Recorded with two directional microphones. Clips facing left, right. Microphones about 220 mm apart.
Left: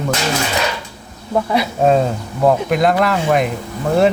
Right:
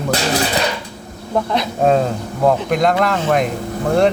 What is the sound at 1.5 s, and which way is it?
Speech, 5° left (ahead or behind).